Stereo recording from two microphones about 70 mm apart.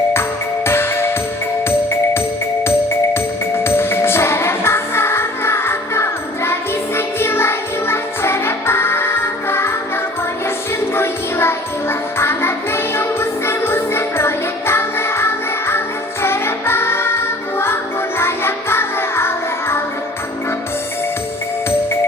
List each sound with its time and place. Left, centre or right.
0.1 s music: left
2.6 s music: left
10.9 s music: left